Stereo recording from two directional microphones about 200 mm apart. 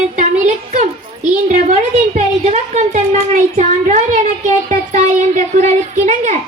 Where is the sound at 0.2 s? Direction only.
35° right (ahead or behind).